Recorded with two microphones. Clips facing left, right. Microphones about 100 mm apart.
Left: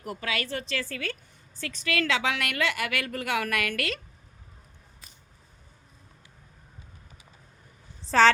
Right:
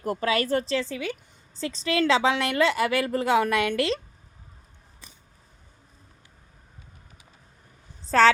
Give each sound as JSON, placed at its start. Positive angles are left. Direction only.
{"t": 0.0, "sound": "a woman's voice", "side_deg": -35}
{"t": 0.8, "sound": "a woman's voice", "side_deg": -15}
{"t": 1.6, "sound": "a woman's voice", "side_deg": -30}
{"t": 8.1, "sound": "a woman's voice", "side_deg": 0}